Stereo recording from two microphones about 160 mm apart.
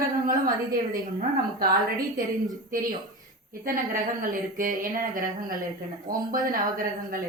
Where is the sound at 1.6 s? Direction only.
60° right (ahead or behind).